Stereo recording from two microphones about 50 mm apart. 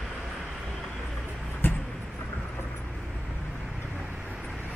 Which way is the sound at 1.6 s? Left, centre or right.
Left.